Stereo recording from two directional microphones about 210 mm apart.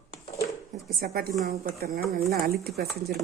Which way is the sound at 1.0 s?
45° right (ahead or behind).